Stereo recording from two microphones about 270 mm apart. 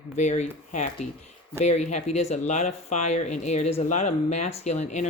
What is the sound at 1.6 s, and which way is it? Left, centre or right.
Speech, left.